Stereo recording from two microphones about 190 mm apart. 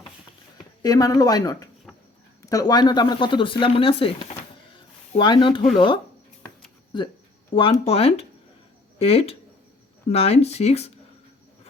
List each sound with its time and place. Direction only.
0.8 s speech: 20° left (ahead or behind); by 10.9 s 35° left (ahead or behind)